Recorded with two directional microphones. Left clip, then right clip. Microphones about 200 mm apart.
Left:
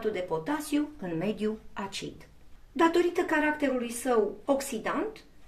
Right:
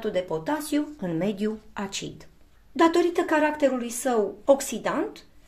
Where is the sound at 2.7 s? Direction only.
45° right (ahead or behind).